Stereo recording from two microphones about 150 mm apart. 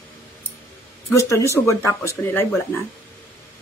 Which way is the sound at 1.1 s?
20° left (ahead or behind).